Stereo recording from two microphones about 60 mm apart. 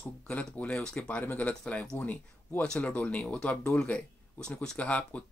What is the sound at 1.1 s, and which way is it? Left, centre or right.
Speech, left.